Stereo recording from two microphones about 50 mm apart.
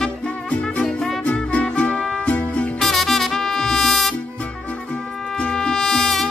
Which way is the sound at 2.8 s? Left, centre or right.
Centre.